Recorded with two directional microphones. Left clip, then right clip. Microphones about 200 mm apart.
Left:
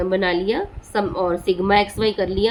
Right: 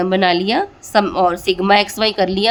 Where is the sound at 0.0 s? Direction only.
50° right (ahead or behind).